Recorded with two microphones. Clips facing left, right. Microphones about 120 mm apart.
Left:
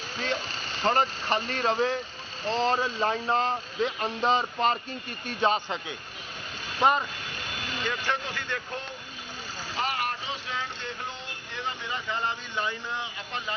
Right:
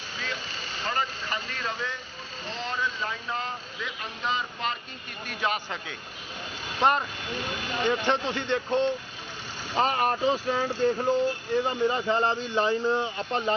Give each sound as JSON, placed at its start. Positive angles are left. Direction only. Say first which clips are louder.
{"t": 0.9, "sound": "speech", "louder": "left 6 dB", "side_deg": 45}
{"t": 6.8, "sound": "speech", "louder": "even", "side_deg": 0}
{"t": 7.9, "sound": "speech", "louder": "right 6 dB", "side_deg": -20}
{"t": 9.7, "sound": "speech", "louder": "right 6 dB", "side_deg": -35}